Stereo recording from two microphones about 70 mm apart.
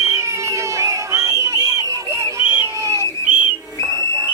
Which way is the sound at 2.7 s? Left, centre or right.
Right.